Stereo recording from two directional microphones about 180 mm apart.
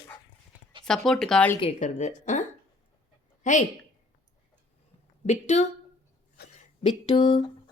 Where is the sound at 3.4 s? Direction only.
45° left (ahead or behind).